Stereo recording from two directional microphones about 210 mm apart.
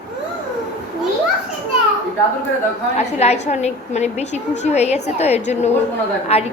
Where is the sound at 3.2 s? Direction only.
30° left (ahead or behind).